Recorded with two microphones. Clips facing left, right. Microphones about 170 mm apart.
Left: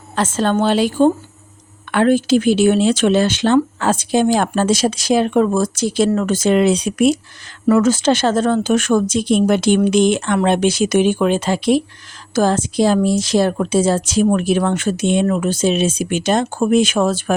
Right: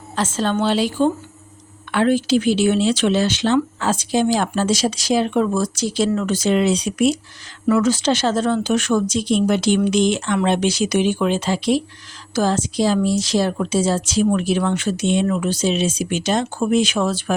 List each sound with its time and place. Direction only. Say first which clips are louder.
0.2 s speech: left 3 dB; 55° left (ahead or behind)